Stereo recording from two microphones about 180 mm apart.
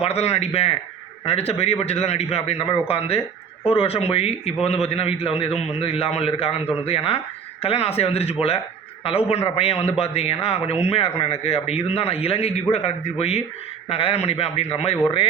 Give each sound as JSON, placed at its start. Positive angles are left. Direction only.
{"t": 0.0, "sound": "a man's voice", "side_deg": 35}